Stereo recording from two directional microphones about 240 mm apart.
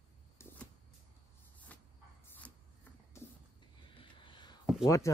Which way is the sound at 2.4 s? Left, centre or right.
Centre.